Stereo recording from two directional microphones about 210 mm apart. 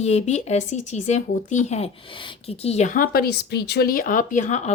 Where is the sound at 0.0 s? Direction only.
30° left (ahead or behind).